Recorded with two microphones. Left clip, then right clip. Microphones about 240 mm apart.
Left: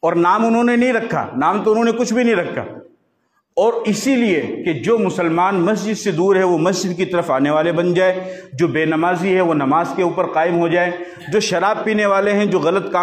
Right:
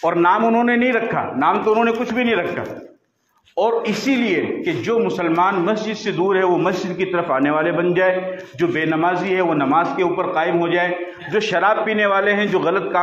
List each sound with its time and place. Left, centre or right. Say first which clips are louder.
0.0 s a man's voice: left 1 dB; left
3.5 s a man's voice: left 2 dB; left